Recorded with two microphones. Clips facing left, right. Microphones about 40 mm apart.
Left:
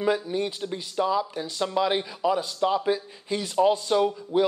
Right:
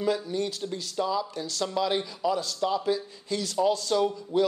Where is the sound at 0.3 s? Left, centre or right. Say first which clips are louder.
Left 2 dB; left.